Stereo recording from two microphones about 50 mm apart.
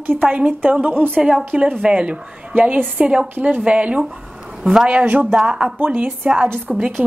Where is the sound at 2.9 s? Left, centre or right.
Right.